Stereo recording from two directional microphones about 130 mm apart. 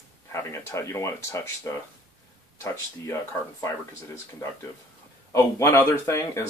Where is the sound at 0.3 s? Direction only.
20° left (ahead or behind).